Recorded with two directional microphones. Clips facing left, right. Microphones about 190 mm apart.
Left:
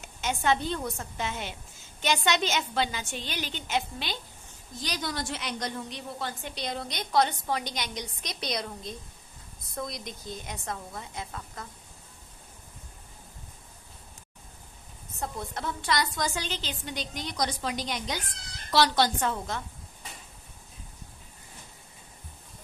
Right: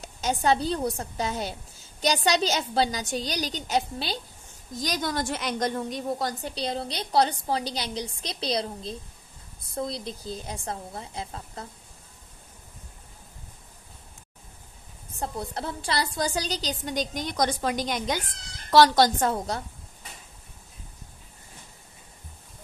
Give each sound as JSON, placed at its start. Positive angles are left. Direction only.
{"t": 0.0, "sound": "a woman's voice", "side_deg": -35}
{"t": 15.1, "sound": "a woman's voice", "side_deg": -30}